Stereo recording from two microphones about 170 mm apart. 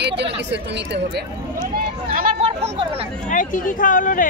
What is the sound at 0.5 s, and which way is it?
Speech, 90° right.